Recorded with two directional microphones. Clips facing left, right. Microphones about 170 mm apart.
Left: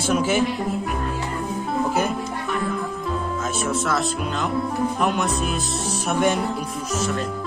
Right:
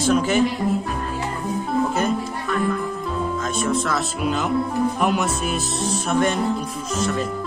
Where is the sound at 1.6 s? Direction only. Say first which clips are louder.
Right 1 dB; 5° left (ahead or behind).